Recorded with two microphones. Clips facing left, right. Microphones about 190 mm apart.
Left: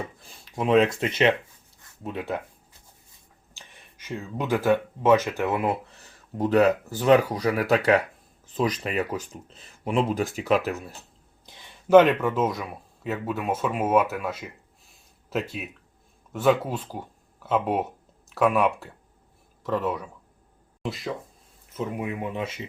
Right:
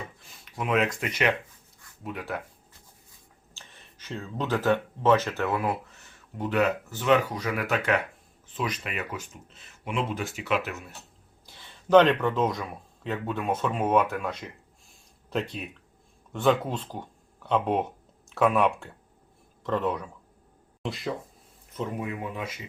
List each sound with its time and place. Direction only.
0.3 s a sound: 30° left (ahead or behind)
0.9 s speech: 25° left (ahead or behind)
3.5 s speech: 15° left (ahead or behind)
6.0 s speech: 35° left (ahead or behind)
11.4 s speech: 15° left (ahead or behind)
22.0 s speech: 20° left (ahead or behind)